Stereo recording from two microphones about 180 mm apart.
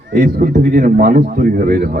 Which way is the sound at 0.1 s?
60° right (ahead or behind).